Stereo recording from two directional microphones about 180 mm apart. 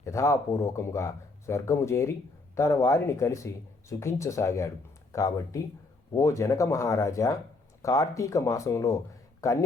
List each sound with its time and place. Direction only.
0.0 s a man's voice: 15° left (ahead or behind)